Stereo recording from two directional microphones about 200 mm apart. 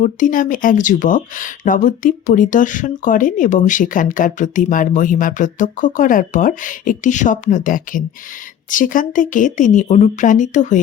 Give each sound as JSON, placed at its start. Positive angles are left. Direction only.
{"t": 0.0, "sound": "speech", "side_deg": 40}